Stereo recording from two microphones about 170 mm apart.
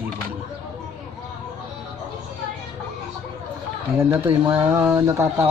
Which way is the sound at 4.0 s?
15° right (ahead or behind).